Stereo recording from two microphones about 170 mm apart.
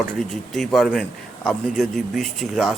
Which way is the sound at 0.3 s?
Centre (ahead or behind).